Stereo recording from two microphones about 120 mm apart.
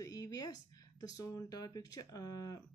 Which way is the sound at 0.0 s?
30° left (ahead or behind).